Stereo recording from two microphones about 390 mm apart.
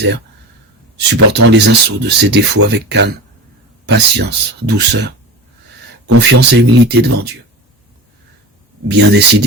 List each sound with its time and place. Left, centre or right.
0.9 s speech: right
8.9 s speech: right